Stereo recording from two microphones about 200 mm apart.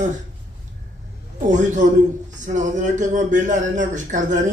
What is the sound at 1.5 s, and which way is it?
Speech, 40° right (ahead or behind).